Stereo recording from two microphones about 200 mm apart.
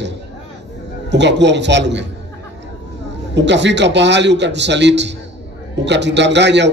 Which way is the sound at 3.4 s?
60° right (ahead or behind).